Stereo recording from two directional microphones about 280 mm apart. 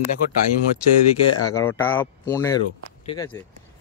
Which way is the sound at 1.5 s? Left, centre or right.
Centre.